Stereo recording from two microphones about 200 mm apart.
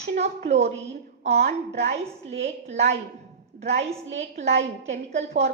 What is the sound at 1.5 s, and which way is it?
Speech, 55° right (ahead or behind).